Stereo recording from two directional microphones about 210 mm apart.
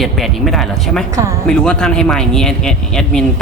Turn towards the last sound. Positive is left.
turn(degrees=5)  # may be behind; listen again after turning